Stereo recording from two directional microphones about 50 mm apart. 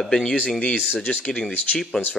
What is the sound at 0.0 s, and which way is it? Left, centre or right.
Speech, centre.